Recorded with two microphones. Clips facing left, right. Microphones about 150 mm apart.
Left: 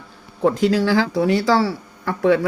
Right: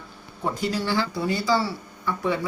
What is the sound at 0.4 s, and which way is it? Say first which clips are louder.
Speech: left 9 dB; 90° left.